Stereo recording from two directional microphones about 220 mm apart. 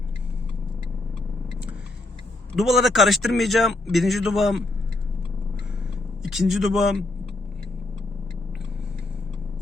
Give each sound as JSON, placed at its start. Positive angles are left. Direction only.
{"t": 2.6, "sound": "speech", "side_deg": 0}
{"t": 6.2, "sound": "speech", "side_deg": 0}